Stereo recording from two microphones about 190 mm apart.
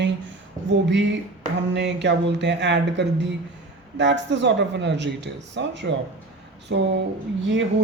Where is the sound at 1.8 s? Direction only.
65° right (ahead or behind).